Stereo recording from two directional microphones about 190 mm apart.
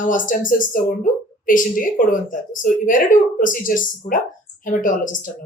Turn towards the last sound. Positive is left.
turn(degrees=45)  # may be behind; listen again after turning